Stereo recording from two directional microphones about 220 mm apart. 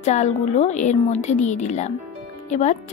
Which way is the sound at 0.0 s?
30° left (ahead or behind).